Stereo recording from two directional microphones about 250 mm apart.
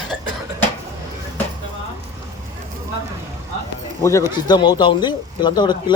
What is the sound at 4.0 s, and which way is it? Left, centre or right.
Speech, centre.